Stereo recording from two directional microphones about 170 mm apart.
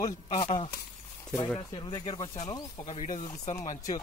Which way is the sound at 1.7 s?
25° left (ahead or behind).